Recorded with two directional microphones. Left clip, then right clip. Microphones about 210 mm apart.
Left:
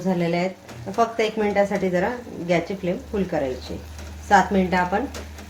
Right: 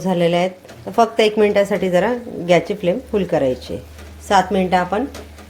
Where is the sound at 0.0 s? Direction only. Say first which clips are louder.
Right 7 dB; 40° right (ahead or behind).